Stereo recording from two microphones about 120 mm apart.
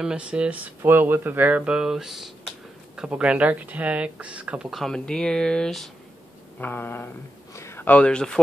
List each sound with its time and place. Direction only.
0.0 s speech: 10° right (ahead or behind)
6.6 s speech: 15° left (ahead or behind)